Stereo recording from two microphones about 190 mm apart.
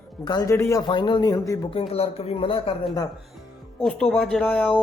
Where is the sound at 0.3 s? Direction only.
20° left (ahead or behind).